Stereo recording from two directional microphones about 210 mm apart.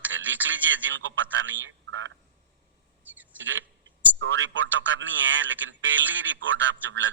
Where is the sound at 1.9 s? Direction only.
65° right (ahead or behind).